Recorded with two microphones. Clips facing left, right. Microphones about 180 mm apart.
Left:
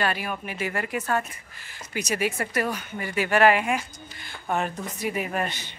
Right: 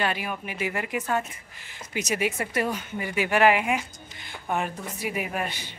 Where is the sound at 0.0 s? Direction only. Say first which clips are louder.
Left 1 dB; 15° right (ahead or behind).